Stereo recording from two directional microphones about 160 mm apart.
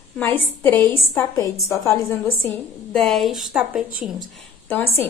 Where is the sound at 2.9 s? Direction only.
Centre (ahead or behind).